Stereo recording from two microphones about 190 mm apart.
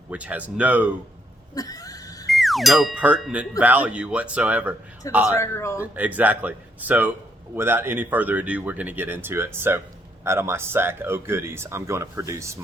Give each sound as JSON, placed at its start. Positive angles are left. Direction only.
{"t": 0.1, "sound": "speech", "side_deg": -5}
{"t": 1.5, "sound": "neigh", "side_deg": 20}
{"t": 2.2, "sound": "speech", "side_deg": 0}
{"t": 5.3, "sound": "speech", "side_deg": 15}
{"t": 5.8, "sound": "speech", "side_deg": -10}